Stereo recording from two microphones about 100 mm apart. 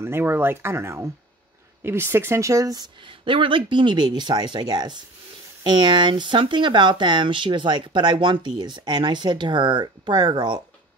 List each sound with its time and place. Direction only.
0.0 s speech: 25° right (ahead or behind)
3.0 s speech: 60° right (ahead or behind)